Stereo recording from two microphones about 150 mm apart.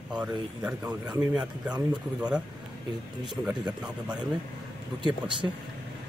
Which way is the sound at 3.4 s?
5° right (ahead or behind).